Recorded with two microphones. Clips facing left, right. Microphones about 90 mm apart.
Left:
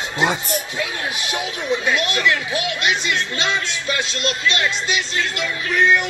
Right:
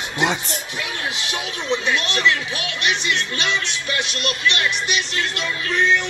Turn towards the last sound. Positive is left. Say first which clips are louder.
# left 2 dB
turn(degrees=20)  # may be behind; listen again after turning